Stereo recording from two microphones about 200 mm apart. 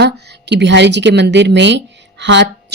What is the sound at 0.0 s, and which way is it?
Speech, 55° right (ahead or behind).